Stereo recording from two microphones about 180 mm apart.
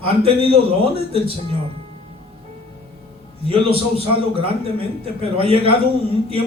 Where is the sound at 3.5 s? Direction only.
30° right (ahead or behind).